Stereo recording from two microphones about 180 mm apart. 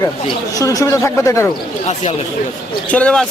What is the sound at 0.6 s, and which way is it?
Speech, 20° left (ahead or behind).